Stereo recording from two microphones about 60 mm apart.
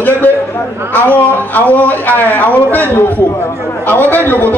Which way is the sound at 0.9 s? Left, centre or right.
Left.